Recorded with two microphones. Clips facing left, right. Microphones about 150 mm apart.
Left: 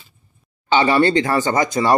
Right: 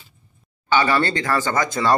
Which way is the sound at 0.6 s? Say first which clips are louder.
Left 4 dB; 20° left (ahead or behind).